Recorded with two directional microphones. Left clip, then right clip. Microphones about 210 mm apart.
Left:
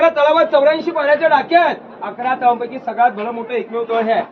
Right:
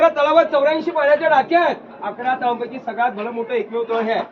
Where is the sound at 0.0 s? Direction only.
30° left (ahead or behind).